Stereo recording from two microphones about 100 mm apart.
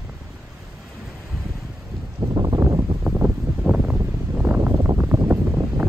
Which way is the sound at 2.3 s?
40° right (ahead or behind).